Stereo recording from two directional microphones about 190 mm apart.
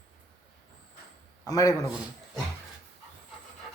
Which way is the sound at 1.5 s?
20° left (ahead or behind).